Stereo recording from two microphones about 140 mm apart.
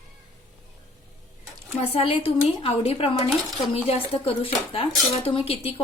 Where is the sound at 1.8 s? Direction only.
45° left (ahead or behind).